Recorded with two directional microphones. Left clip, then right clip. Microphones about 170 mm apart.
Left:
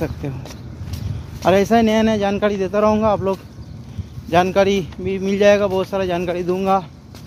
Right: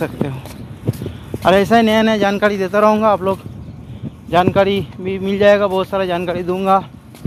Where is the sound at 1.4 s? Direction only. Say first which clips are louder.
Right 3 dB; 5° right (ahead or behind).